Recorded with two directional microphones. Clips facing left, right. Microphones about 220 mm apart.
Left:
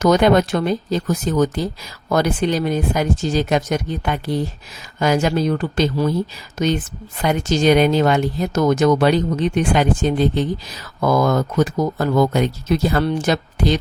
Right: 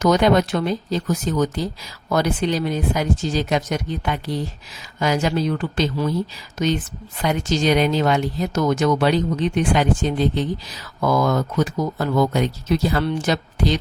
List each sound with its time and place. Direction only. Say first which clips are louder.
0.0 s speech: left 2 dB; 50° left (ahead or behind)